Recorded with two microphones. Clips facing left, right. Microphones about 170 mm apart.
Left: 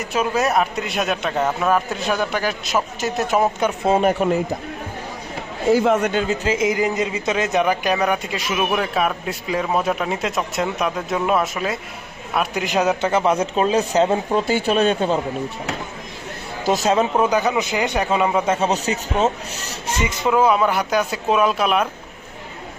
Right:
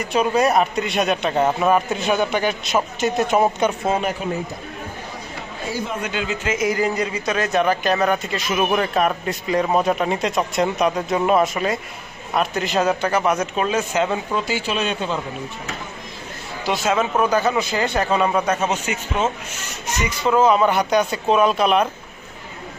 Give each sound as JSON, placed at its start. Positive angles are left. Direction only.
{"t": 0.0, "sound": "speech", "side_deg": 5}
{"t": 1.4, "sound": "speech", "side_deg": -10}
{"t": 4.2, "sound": "a man's voice", "side_deg": 65}
{"t": 5.8, "sound": "speech", "side_deg": 80}
{"t": 6.1, "sound": "speech", "side_deg": 45}
{"t": 6.7, "sound": "a man's voice", "side_deg": 20}
{"t": 14.4, "sound": "speech", "side_deg": 55}
{"t": 16.6, "sound": "speech", "side_deg": 40}
{"t": 17.2, "sound": "a man's voice", "side_deg": 15}
{"t": 20.3, "sound": "speech", "side_deg": 5}